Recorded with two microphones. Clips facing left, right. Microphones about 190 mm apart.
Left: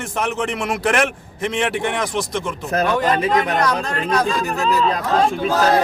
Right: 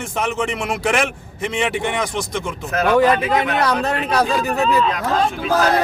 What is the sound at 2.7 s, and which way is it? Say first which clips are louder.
Speech: right 3 dB; 40° left (ahead or behind).